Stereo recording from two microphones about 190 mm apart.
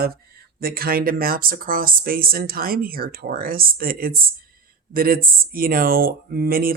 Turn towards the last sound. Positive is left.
turn(degrees=-50)  # may be behind; listen again after turning